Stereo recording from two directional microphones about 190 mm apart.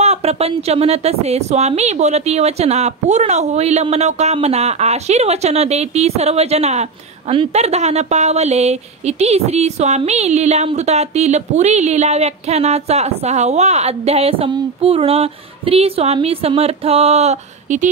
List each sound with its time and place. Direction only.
0.0 s a woman's voice: 35° right (ahead or behind)